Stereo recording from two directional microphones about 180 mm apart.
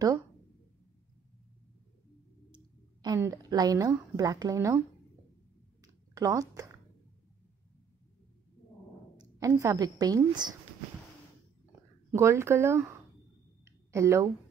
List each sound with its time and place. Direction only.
2.5 s a woman's voice: 20° right (ahead or behind)
6.1 s speech: 20° right (ahead or behind)
9.1 s a sound: 20° right (ahead or behind)
9.5 s a woman's voice: 15° right (ahead or behind)
12.1 s speech: 15° right (ahead or behind)
13.7 s a sound: 15° right (ahead or behind)